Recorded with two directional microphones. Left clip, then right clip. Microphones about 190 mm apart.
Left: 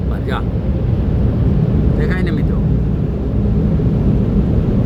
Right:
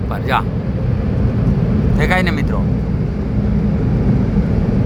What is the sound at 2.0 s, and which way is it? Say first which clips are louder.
Speech: right 5 dB; 15° right (ahead or behind).